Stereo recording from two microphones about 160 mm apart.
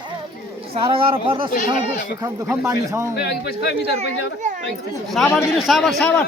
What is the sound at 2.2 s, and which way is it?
Speech, 20° right (ahead or behind).